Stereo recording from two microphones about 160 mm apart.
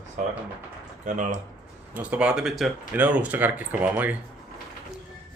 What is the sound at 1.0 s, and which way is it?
Speech, 50° right (ahead or behind).